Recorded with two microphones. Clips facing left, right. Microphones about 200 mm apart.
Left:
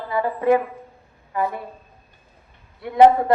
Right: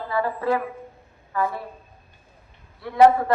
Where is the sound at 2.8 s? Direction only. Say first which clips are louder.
Left 2 dB; 20° left (ahead or behind).